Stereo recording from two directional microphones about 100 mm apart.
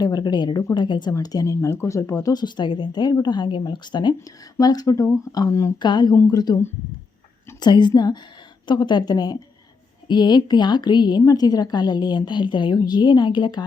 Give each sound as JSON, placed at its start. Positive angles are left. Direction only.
{"t": 0.0, "sound": "a woman's voice", "side_deg": 45}
{"t": 1.1, "sound": "speech", "side_deg": 40}
{"t": 5.8, "sound": "a woman's voice", "side_deg": 50}
{"t": 7.6, "sound": "a woman's voice", "side_deg": 50}